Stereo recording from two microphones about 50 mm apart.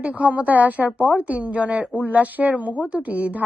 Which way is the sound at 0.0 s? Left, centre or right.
Right.